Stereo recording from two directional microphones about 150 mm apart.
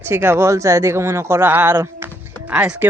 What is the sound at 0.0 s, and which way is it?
Speech, 15° right (ahead or behind).